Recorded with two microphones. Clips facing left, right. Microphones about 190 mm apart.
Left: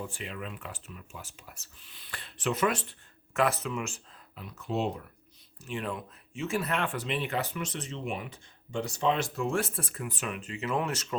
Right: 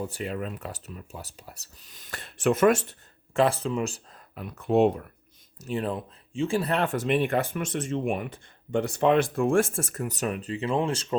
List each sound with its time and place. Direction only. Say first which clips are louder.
0.0 s speech: right 7 dB; 40° right (ahead or behind)
3.3 s speech: right 5 dB; 30° right (ahead or behind)
4.4 s speech: right 10 dB; 55° right (ahead or behind)
5.5 s speech: right 6 dB; 40° right (ahead or behind)